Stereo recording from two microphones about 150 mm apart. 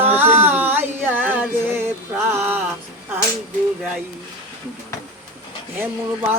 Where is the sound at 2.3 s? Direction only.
15° right (ahead or behind).